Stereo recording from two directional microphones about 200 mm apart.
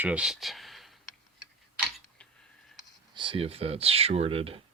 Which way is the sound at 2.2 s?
5° left (ahead or behind).